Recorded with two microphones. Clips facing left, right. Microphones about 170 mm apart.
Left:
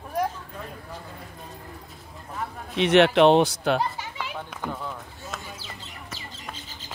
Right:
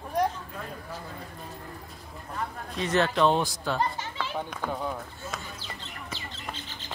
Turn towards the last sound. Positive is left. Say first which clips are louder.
# right 1 dB
turn(degrees=5)  # may be behind; listen again after turning